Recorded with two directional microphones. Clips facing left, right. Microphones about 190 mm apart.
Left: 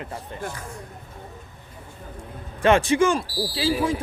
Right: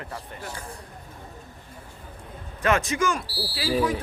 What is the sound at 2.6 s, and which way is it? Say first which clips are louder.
Speech: left 6 dB; 30° left (ahead or behind).